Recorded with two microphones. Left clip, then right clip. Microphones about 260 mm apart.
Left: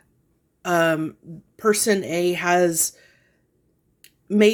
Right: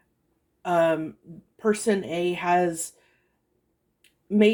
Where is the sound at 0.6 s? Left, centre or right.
Left.